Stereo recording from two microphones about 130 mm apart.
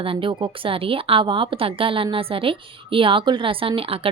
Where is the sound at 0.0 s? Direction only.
40° right (ahead or behind).